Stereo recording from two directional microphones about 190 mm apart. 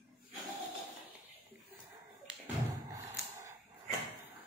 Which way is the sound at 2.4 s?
15° right (ahead or behind).